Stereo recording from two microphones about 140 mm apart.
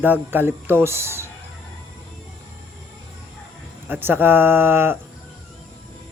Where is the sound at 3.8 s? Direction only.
15° right (ahead or behind).